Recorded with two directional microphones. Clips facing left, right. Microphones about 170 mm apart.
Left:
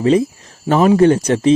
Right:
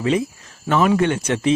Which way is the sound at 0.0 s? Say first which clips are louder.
Left 6 dB; 35° left (ahead or behind).